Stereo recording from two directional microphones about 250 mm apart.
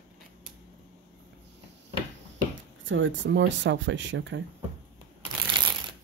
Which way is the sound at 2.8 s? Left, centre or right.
Right.